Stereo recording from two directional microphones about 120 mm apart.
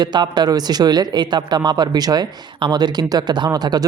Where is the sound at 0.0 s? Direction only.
35° right (ahead or behind).